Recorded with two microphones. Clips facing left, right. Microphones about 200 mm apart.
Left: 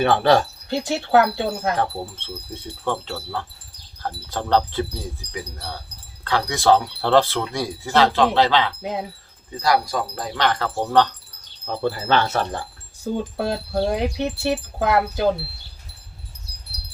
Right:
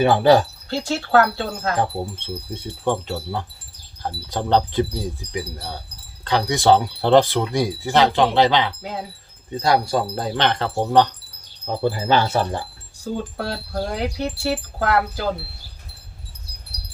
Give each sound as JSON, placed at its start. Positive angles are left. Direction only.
{"t": 0.0, "sound": "speech", "side_deg": -10}
{"t": 0.7, "sound": "speech", "side_deg": 15}
{"t": 1.7, "sound": "speech", "side_deg": -15}
{"t": 8.8, "sound": "wind chime", "side_deg": 20}
{"t": 9.6, "sound": "speech", "side_deg": -25}
{"t": 13.4, "sound": "wind chime", "side_deg": 20}